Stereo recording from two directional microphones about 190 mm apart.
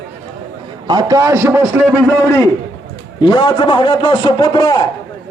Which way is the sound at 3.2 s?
20° left (ahead or behind).